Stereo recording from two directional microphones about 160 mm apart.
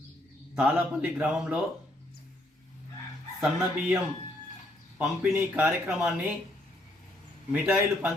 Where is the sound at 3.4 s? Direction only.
5° right (ahead or behind).